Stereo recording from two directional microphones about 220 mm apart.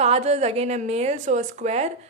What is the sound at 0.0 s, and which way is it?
A woman's voice, 30° right (ahead or behind).